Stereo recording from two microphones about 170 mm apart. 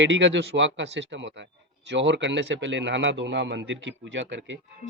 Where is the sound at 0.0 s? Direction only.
90° right.